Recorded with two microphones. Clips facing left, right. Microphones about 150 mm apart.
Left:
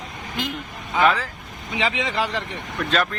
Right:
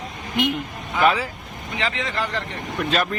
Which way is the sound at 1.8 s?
15° left (ahead or behind).